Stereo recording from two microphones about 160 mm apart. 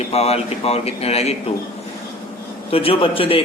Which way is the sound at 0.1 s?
40° left (ahead or behind).